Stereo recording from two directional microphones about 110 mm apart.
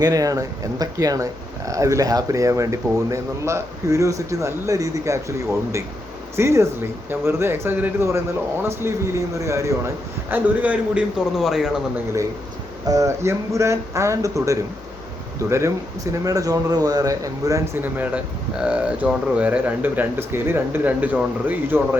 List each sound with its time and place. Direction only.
0.0 s speech: 35° right (ahead or behind); by 11.7 s 5° right (ahead or behind)
12.9 s speech: 30° right (ahead or behind)
17.8 s speech: 15° right (ahead or behind)